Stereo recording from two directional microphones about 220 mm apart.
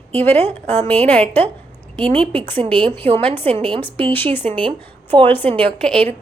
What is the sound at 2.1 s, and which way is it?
Speech, 25° right (ahead or behind).